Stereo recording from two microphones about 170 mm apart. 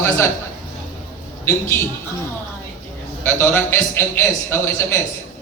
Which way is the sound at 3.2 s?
15° left (ahead or behind).